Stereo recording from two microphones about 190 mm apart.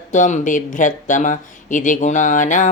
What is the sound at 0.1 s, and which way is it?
Speech, 40° left (ahead or behind).